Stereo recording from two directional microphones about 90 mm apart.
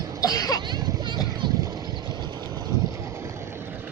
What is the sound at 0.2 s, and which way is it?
Cough, 45° left (ahead or behind).